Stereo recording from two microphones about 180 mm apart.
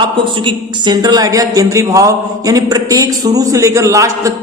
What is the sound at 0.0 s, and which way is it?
Speech, 25° right (ahead or behind).